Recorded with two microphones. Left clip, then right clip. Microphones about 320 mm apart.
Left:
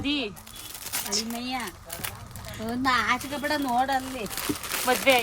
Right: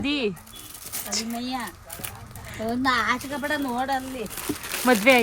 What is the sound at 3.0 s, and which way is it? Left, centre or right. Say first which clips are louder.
Speech: right 1 dB; centre.